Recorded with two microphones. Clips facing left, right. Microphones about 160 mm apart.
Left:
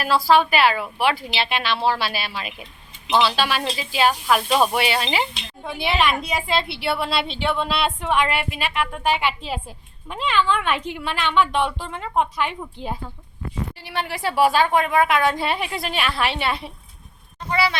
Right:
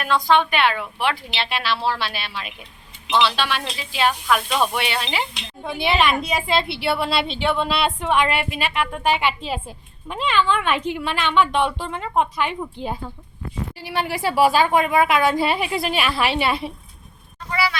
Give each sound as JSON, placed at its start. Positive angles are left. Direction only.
{"t": 0.2, "sound": "a woman's voice", "side_deg": 5}
{"t": 17.5, "sound": "speech", "side_deg": 25}